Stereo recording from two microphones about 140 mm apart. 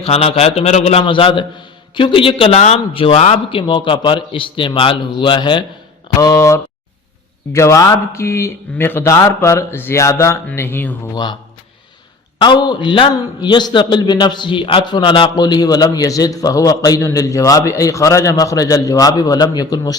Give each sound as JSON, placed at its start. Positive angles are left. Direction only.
{"t": 0.0, "sound": "a man's voice", "side_deg": 45}
{"t": 1.0, "sound": "a man's voice", "side_deg": 35}
{"t": 3.5, "sound": "a man's voice", "side_deg": 35}
{"t": 6.1, "sound": "a man's voice", "side_deg": 25}
{"t": 11.1, "sound": "a man's voice", "side_deg": 30}
{"t": 12.4, "sound": "a man's voice", "side_deg": 30}